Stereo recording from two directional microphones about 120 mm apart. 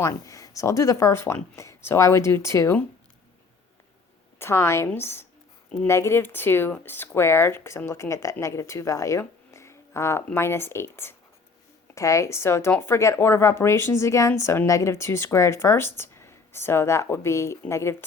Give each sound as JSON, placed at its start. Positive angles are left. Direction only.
{"t": 0.0, "sound": "speech", "side_deg": 30}
{"t": 4.4, "sound": "speech", "side_deg": 20}